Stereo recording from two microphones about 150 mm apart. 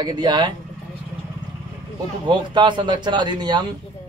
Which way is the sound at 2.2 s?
30° right (ahead or behind).